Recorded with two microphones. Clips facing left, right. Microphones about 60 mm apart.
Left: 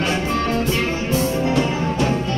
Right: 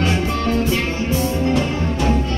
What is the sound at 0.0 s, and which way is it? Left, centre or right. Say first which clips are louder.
Music: right 1 dB; centre.